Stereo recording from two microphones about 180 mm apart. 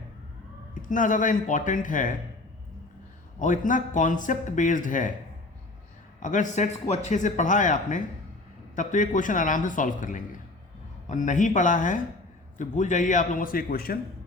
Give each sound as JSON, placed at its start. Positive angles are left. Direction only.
{"t": 0.7, "sound": "a man's voice", "side_deg": 45}
{"t": 3.3, "sound": "a man's voice", "side_deg": 45}
{"t": 6.1, "sound": "a man's voice", "side_deg": 45}